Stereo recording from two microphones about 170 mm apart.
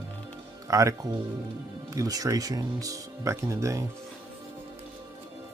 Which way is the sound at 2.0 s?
20° right (ahead or behind).